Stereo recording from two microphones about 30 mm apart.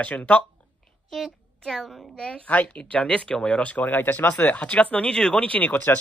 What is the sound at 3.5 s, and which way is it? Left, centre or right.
Speech, left.